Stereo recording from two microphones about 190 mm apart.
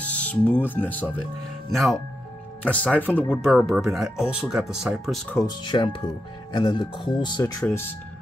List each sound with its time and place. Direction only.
0.0 s speech: 5° left (ahead or behind)
5.6 s speech: 25° left (ahead or behind)
7.6 s speech: 10° left (ahead or behind)